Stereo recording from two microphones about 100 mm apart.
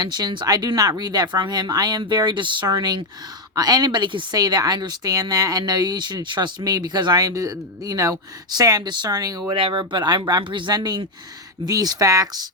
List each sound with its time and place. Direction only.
0.0 s a woman's voice: 45° right (ahead or behind)
9.5 s a woman's voice: 55° right (ahead or behind); by 12.5 s 40° right (ahead or behind)